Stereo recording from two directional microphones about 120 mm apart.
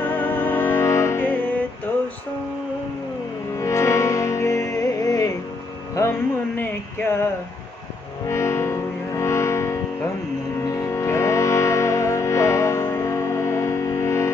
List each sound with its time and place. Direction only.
0.0 s music: 15° left (ahead or behind)
3.5 s music: 25° left (ahead or behind)
5.9 s a sound: 20° left (ahead or behind)
8.3 s music: 25° left (ahead or behind)